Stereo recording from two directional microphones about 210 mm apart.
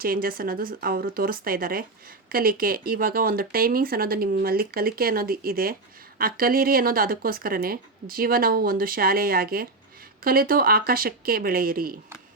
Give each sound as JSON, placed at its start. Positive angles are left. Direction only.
{"t": 0.0, "sound": "speech", "side_deg": -45}